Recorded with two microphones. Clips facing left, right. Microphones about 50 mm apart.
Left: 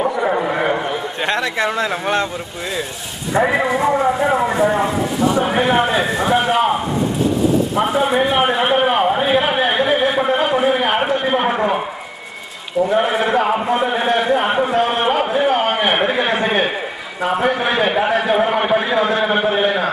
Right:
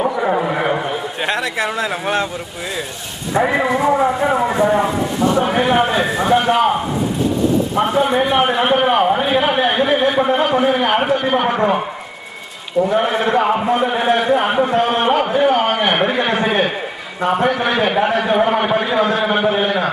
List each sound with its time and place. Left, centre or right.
0.0 s a sound: centre
3.3 s a man's voice: centre
11.2 s a man's voice: centre
11.5 s a man's voice: centre
12.8 s a man's voice: centre
15.5 s a sound: left
15.8 s a man's voice: centre